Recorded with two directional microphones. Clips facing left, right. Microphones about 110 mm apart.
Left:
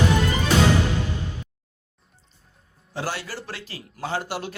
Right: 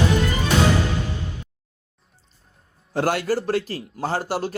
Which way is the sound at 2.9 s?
55° right (ahead or behind).